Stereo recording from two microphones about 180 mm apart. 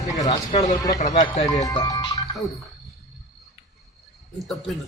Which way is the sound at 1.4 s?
20° left (ahead or behind).